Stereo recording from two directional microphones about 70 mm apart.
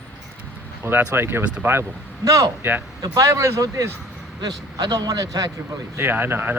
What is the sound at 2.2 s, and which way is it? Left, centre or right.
Speech, right.